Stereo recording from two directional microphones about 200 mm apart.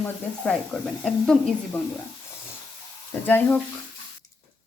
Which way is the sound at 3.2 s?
10° left (ahead or behind).